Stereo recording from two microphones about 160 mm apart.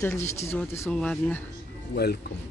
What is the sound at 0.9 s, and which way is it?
Speech, 5° left (ahead or behind).